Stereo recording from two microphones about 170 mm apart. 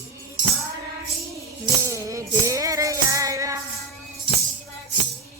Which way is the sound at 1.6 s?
15° right (ahead or behind).